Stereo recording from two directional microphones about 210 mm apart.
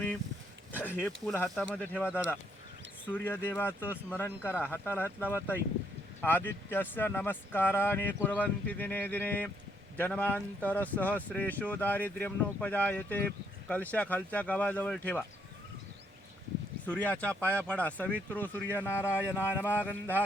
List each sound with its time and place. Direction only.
0.9 s speech: 10° left (ahead or behind)
16.8 s speech: 5° left (ahead or behind)